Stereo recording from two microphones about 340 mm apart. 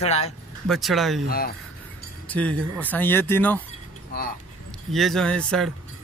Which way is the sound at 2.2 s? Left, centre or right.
Centre.